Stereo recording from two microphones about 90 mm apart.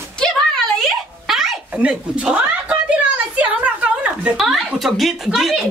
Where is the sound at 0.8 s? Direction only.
Centre (ahead or behind).